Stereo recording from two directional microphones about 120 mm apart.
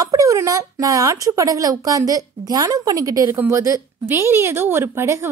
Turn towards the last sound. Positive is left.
turn(degrees=-20)  # may be behind; listen again after turning